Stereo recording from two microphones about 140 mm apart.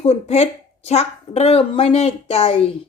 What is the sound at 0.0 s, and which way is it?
Speech, 50° left (ahead or behind).